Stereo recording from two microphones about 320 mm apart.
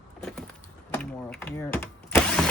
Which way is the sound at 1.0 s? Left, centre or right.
Centre.